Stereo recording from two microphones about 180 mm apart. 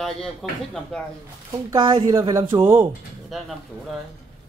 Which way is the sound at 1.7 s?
25° right (ahead or behind).